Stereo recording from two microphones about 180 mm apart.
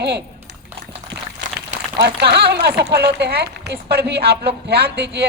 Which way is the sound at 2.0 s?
70° right (ahead or behind).